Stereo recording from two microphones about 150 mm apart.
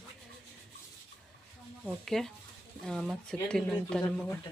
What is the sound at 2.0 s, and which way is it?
A woman's voice, centre (ahead or behind).